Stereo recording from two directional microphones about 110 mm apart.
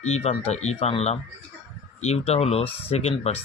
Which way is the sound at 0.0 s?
85° left.